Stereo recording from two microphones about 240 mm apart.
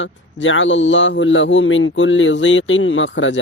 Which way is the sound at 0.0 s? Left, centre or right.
Left.